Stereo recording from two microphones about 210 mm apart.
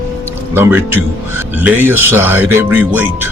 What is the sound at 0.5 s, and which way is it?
Speech, 10° right (ahead or behind).